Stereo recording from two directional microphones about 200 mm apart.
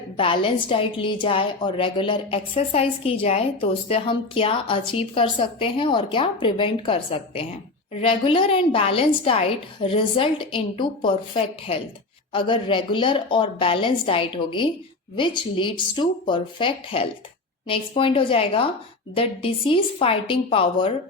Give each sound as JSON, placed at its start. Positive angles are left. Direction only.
{"t": 0.4, "sound": "a woman's voice", "side_deg": 25}